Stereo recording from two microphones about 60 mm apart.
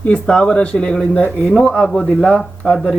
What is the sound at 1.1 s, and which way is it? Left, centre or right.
Speech, left.